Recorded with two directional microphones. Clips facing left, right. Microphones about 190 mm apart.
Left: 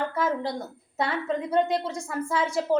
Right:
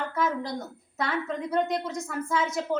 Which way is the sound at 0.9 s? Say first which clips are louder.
Left 2 dB; 30° left (ahead or behind).